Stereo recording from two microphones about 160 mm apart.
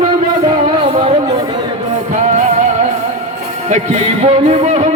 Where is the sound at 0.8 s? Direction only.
30° right (ahead or behind).